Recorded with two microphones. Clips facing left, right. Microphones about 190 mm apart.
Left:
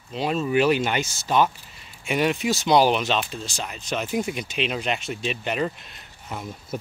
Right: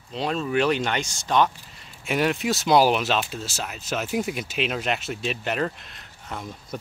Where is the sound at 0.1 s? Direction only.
5° left (ahead or behind).